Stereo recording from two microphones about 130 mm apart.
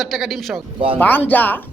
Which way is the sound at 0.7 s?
45° right (ahead or behind).